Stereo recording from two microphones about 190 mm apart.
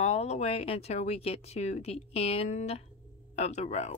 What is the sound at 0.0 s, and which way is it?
Speech, 35° left (ahead or behind).